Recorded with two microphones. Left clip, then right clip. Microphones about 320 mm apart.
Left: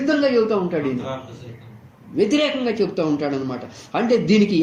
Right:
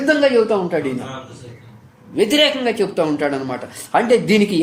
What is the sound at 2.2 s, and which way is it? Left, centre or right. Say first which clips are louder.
A man's voice: right 4 dB; right.